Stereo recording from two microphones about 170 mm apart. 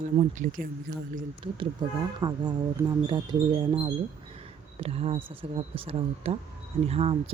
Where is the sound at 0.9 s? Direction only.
80° right.